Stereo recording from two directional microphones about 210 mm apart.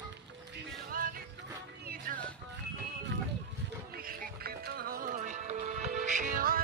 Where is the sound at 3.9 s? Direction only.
45° right (ahead or behind).